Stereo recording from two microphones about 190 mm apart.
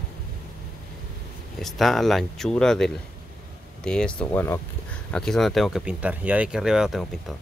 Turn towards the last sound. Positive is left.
turn(degrees=0)  # may be behind; listen again after turning